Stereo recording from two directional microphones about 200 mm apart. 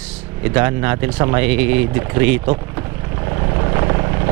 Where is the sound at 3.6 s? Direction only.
20° right (ahead or behind).